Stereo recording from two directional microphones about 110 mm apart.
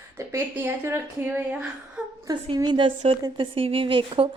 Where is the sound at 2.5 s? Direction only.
45° right (ahead or behind).